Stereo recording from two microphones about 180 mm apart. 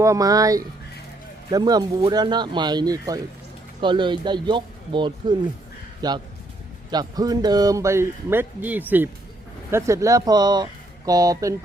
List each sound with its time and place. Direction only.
0.0 s speech: 20° right (ahead or behind)